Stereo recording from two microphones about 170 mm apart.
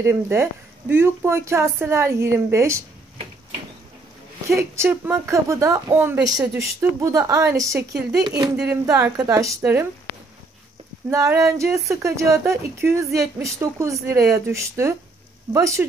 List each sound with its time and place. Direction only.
0.0 s speech: 15° right (ahead or behind)
4.5 s speech: 15° right (ahead or behind)
6.4 s speech: 5° right (ahead or behind)
7.0 s a woman's voice: 20° right (ahead or behind)
11.1 s a woman's voice: 20° right (ahead or behind)